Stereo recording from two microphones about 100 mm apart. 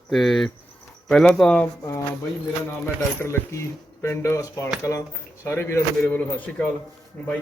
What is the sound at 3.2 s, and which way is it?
A man's voice, 25° left (ahead or behind).